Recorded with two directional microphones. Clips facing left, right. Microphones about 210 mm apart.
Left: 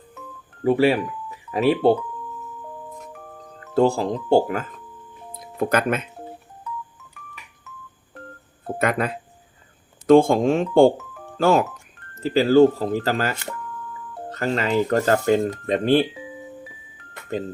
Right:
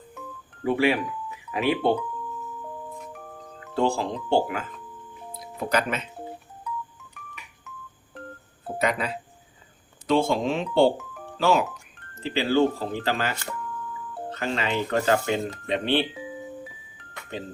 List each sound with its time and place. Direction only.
0.6 s speech: 35° left (ahead or behind)
3.1 s music: centre (ahead or behind)
3.8 s speech: 40° left (ahead or behind)
5.5 s speech: 50° left (ahead or behind)
8.8 s speech: 50° left (ahead or behind)
10.9 s music: centre (ahead or behind)
11.3 s speech: 45° left (ahead or behind)